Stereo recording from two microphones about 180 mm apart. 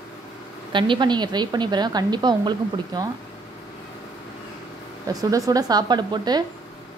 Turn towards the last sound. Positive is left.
turn(degrees=-25)  # may be behind; listen again after turning